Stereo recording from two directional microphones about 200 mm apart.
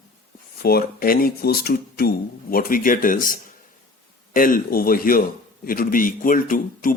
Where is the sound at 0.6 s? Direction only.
50° left (ahead or behind).